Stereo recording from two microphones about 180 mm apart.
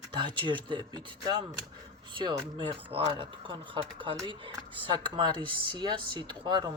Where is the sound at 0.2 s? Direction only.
25° right (ahead or behind).